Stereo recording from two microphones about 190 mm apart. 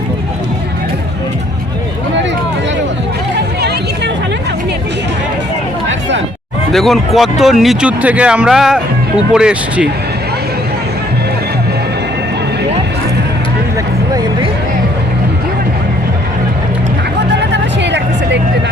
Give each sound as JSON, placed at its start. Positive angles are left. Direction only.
{"t": 5.9, "sound": "a sound", "side_deg": -75}
{"t": 6.7, "sound": "speech", "side_deg": 0}
{"t": 17.3, "sound": "music", "side_deg": -65}